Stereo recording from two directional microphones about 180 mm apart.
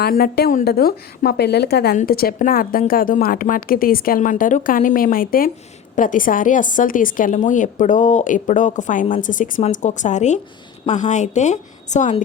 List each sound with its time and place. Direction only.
0.0 s a woman's voice: 55° left (ahead or behind); by 12.2 s 40° left (ahead or behind)